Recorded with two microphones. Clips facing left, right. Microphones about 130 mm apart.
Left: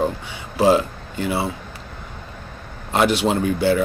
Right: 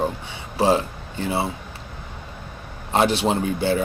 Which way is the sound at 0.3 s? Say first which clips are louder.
Left 3 dB; 30° right (ahead or behind).